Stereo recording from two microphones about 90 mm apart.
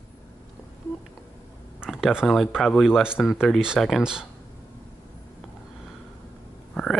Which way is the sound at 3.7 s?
Centre (ahead or behind).